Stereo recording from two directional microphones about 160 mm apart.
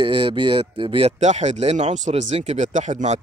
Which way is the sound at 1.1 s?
45° right (ahead or behind).